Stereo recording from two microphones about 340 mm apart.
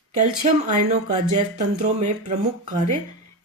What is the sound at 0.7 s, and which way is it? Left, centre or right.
Speech, right.